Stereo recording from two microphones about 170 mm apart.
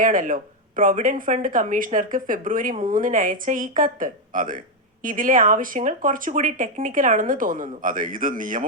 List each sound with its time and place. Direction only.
0.0 s speech: 50° right (ahead or behind)